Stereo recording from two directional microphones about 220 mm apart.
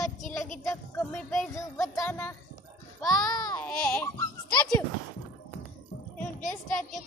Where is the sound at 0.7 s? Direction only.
5° left (ahead or behind).